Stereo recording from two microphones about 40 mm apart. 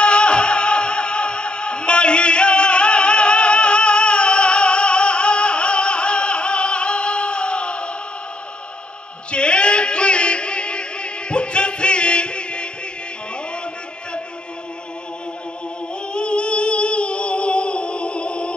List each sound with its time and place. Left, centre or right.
0.0 s music: left
9.3 s a sound: left
16.1 s music: left